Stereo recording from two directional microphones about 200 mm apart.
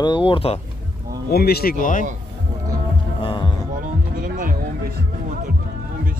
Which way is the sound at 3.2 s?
25° left (ahead or behind).